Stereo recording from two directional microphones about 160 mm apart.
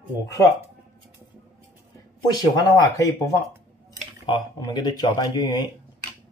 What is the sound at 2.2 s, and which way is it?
Speech, 25° left (ahead or behind).